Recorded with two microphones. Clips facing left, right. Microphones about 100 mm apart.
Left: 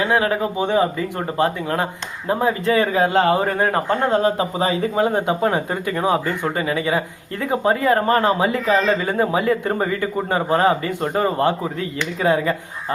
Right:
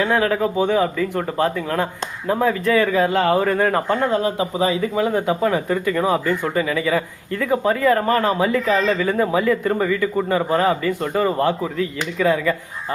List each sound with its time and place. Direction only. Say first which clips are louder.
0.0 s speech: right 1 dB; 20° left (ahead or behind)